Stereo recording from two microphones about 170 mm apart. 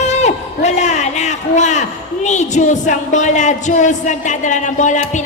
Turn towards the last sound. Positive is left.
turn(degrees=45)  # may be behind; listen again after turning